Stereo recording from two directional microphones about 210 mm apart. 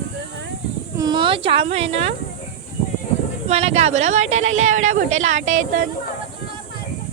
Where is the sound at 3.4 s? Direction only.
30° right (ahead or behind).